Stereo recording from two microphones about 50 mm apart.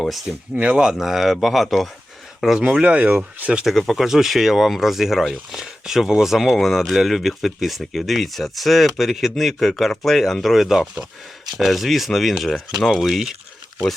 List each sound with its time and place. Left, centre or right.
0.3 s speech: centre
0.9 s speech: centre
2.6 s speech: centre
2.8 s speech: right
3.8 s speech: centre